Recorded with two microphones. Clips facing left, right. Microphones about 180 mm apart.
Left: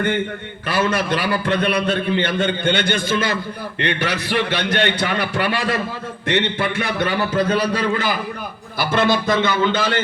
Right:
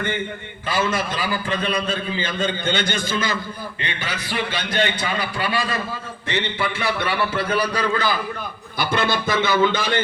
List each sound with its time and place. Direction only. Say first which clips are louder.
0.7 s a man's voice: left 3 dB; 75° left (ahead or behind); by 3.3 s 60° left (ahead or behind)
3.8 s a man's voice: left 11 dB; 70° left (ahead or behind)
6.6 s a man's voice: left 3 dB; 45° left (ahead or behind); by 8.1 s 25° left (ahead or behind)
8.8 s a man's voice: left 4 dB; centre (ahead or behind)